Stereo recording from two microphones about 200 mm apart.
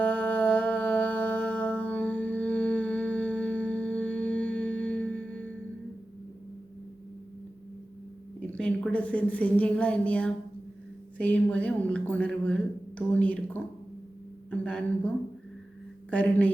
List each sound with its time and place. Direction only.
0.0 s music: 10° left (ahead or behind)
8.4 s a woman's voice: 5° left (ahead or behind)
14.6 s speech: 5° left (ahead or behind)